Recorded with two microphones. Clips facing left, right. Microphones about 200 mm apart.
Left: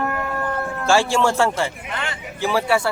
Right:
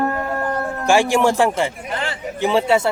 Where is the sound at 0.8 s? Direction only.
15° right (ahead or behind).